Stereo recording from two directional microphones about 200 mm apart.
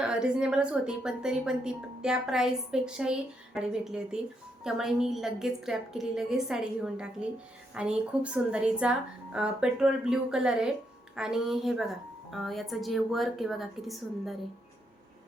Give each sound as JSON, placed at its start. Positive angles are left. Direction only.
{"t": 0.0, "sound": "a woman's voice", "side_deg": -5}